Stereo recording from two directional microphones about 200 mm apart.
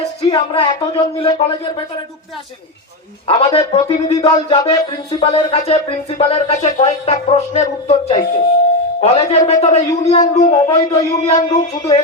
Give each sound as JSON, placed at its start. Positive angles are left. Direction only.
{"t": 0.2, "sound": "a man's voice", "side_deg": 25}
{"t": 3.2, "sound": "a man's voice", "side_deg": 25}
{"t": 10.9, "sound": "a man's voice", "side_deg": 20}